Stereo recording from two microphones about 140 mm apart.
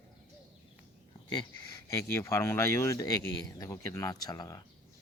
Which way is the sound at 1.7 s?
20° left (ahead or behind).